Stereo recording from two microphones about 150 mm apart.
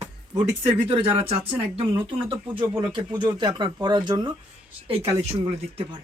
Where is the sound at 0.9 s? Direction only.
40° right (ahead or behind).